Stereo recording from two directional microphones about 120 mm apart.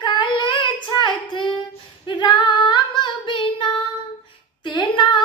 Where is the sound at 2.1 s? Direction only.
40° left (ahead or behind).